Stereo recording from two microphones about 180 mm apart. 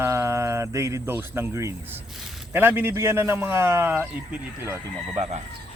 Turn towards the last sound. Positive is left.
turn(degrees=-35)  # may be behind; listen again after turning